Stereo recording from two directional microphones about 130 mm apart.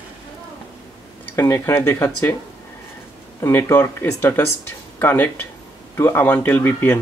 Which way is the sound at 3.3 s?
25° left (ahead or behind).